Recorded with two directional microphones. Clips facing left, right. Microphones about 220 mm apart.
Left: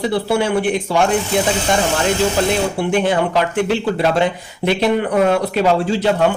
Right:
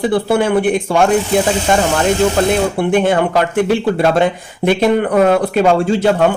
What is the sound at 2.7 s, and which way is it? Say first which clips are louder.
A man's voice: right 3 dB; 50° right (ahead or behind).